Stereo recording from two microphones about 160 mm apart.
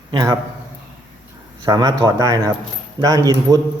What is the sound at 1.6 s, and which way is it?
Speech, 25° right (ahead or behind).